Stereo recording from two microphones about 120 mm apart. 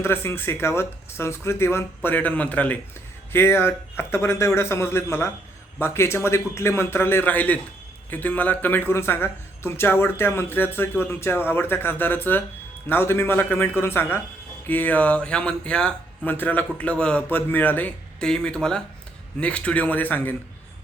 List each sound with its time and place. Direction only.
0.0 s a man's voice: 20° left (ahead or behind)